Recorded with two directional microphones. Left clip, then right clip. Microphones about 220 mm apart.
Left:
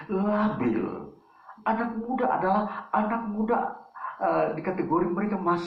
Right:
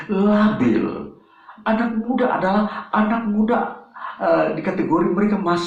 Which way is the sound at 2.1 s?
45° right (ahead or behind).